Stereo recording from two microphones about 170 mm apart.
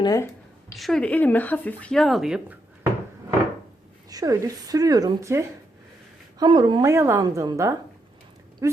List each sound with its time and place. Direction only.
0.0 s a woman's voice: 20° left (ahead or behind)
0.8 s speech: centre (ahead or behind)
4.1 s a woman's voice: 20° right (ahead or behind)
6.9 s a woman's voice: 15° right (ahead or behind)